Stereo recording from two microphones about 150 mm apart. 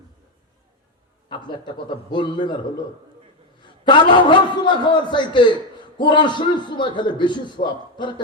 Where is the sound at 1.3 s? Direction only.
30° left (ahead or behind).